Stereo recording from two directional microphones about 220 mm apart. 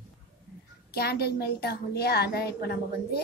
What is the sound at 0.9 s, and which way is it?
A woman's voice, 45° left (ahead or behind).